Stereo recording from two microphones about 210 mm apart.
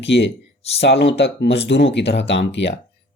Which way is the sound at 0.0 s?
55° left (ahead or behind).